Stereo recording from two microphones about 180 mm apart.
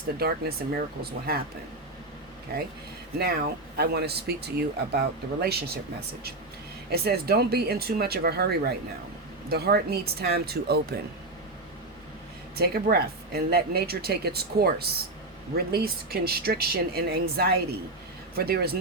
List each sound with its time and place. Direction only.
0.2 s speech: 60° right (ahead or behind)
3.2 s speech: 60° right (ahead or behind)
6.9 s speech: 60° right (ahead or behind)
12.5 s speech: 60° right (ahead or behind)